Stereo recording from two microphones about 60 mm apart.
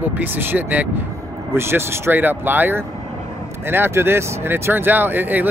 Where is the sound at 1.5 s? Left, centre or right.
Right.